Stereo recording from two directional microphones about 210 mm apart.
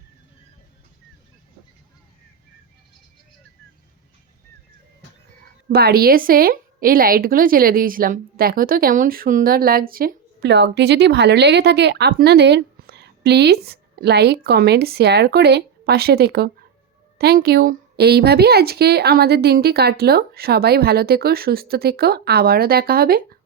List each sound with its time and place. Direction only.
5.6 s a woman's voice: 45° right (ahead or behind)